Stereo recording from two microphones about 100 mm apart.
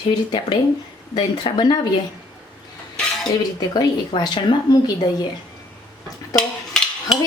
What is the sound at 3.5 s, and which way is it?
A woman's voice, 40° left (ahead or behind).